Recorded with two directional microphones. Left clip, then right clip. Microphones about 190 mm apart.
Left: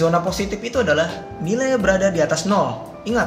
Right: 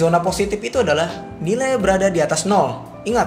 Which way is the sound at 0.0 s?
40° right (ahead or behind).